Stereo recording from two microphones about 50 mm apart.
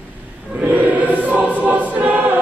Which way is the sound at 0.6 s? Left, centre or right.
Right.